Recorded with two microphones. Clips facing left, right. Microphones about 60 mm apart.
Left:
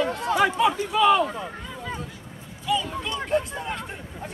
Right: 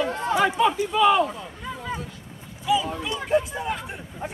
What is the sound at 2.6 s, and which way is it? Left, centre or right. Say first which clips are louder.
Speech: right 3 dB; centre.